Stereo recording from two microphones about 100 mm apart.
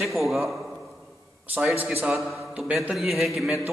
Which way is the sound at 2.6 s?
10° right (ahead or behind).